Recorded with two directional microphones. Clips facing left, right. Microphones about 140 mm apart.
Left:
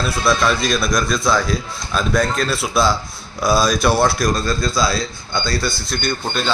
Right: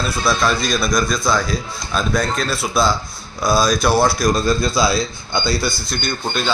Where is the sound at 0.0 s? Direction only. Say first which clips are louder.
Left 1 dB; centre (ahead or behind).